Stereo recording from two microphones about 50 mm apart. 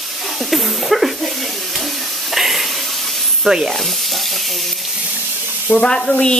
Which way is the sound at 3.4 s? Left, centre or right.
Centre.